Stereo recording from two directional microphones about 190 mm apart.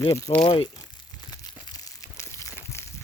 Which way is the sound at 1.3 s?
20° left (ahead or behind).